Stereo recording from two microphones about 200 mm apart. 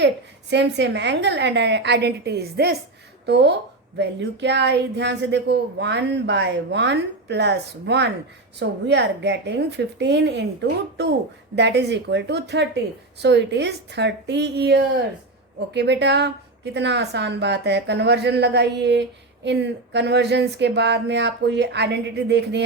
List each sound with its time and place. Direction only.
0.5 s speech: 60° right (ahead or behind)